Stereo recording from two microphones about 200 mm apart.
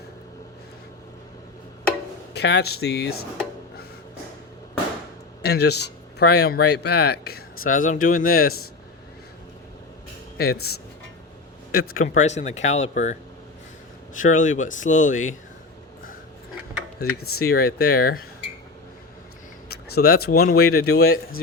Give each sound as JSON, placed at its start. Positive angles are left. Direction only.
{"t": 2.3, "sound": "speech", "side_deg": 55}
{"t": 5.4, "sound": "speech", "side_deg": 55}
{"t": 10.3, "sound": "speech", "side_deg": 50}
{"t": 11.7, "sound": "speech", "side_deg": 50}
{"t": 12.0, "sound": "speech", "side_deg": 35}
{"t": 14.2, "sound": "speech", "side_deg": 40}
{"t": 17.0, "sound": "speech", "side_deg": 50}
{"t": 20.0, "sound": "speech", "side_deg": 50}